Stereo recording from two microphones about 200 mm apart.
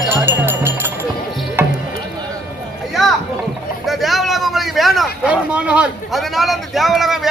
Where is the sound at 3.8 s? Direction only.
Centre (ahead or behind).